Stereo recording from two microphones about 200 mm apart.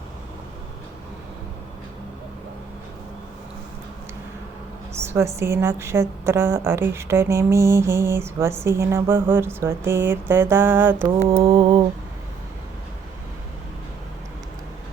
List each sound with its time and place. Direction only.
4.9 s a woman's voice: 15° right (ahead or behind)
11.2 s mantra: 25° right (ahead or behind)